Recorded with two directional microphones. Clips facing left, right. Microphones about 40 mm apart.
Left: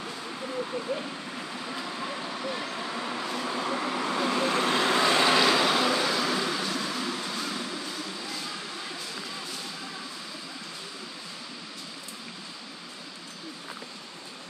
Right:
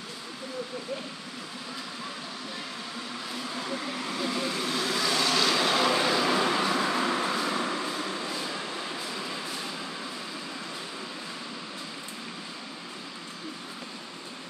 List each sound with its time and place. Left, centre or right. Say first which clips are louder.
2.5 s vehicle: left 5 dB; left
4.5 s vehicle: left 5 dB; left
5.5 s vehicle: left 1 dB; centre; by 7.9 s right